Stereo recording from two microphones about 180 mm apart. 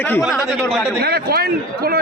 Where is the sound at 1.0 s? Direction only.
60° right (ahead or behind).